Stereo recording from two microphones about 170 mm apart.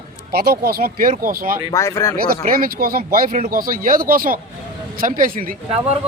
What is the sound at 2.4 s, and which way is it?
Speech, 55° right (ahead or behind).